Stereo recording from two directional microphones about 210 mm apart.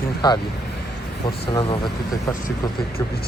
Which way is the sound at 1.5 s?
25° left (ahead or behind).